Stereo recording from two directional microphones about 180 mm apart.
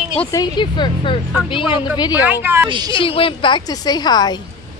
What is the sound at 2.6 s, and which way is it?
Speech, 25° right (ahead or behind).